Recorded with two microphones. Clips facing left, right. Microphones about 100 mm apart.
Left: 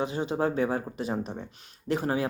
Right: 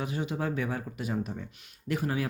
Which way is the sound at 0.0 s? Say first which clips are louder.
Left 5 dB; 30° left (ahead or behind).